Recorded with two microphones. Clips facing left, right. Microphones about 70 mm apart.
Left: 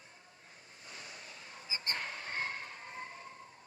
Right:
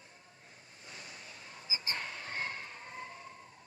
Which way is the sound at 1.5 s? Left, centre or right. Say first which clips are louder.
Even; left.